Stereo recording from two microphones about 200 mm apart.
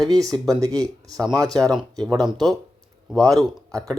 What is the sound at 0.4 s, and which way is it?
Speech, 15° right (ahead or behind).